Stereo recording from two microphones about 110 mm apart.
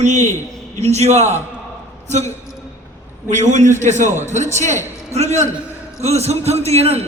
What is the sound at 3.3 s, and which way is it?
A man's voice, 90° right.